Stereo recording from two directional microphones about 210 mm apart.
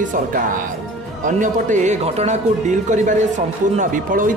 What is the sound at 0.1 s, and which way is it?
Speech, 40° right (ahead or behind).